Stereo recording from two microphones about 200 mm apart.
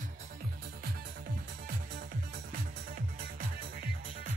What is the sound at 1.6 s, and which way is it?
Music, 50° right (ahead or behind).